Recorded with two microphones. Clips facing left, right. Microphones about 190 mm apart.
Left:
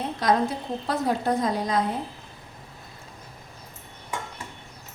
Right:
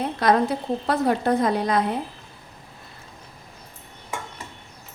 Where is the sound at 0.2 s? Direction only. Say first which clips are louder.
Right 3 dB; 65° right (ahead or behind).